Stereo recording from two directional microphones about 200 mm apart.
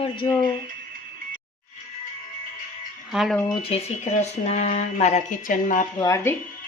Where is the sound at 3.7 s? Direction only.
35° left (ahead or behind).